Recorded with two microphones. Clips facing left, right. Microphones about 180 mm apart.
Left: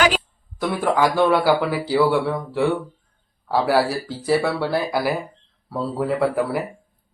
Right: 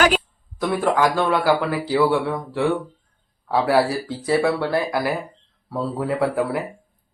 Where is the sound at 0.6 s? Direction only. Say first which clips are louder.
Even; centre (ahead or behind).